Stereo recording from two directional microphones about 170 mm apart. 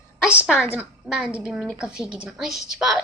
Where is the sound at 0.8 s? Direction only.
5° right (ahead or behind).